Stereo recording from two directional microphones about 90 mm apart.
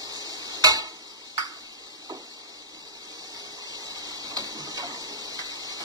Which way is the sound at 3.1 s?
45° right (ahead or behind).